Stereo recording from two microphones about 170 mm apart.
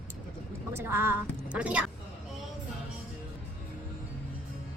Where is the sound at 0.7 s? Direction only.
15° right (ahead or behind).